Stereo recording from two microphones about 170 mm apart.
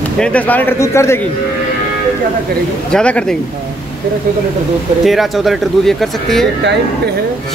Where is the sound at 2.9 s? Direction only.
5° left (ahead or behind).